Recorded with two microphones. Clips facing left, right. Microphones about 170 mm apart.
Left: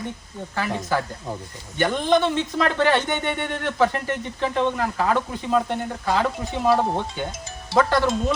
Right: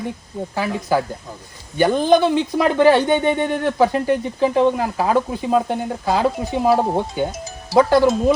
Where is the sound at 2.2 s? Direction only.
10° right (ahead or behind).